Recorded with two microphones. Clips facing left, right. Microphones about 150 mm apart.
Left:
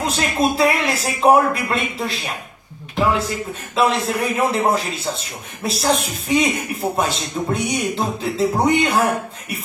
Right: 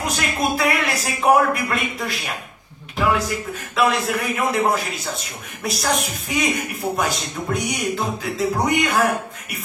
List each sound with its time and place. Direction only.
0.0 s a woman's voice: 30° left (ahead or behind)
3.7 s a woman's voice: 25° left (ahead or behind)